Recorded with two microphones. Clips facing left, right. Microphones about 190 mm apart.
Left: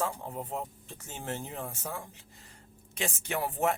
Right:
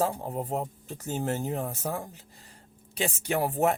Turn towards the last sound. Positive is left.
turn(degrees=-35)  # may be behind; listen again after turning